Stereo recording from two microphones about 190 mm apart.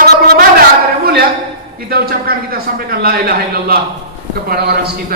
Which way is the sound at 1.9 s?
55° right (ahead or behind).